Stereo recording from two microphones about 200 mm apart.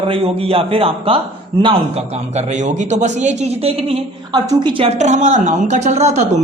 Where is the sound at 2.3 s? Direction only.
35° right (ahead or behind).